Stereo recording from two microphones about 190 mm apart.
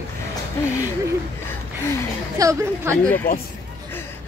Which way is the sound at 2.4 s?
15° right (ahead or behind).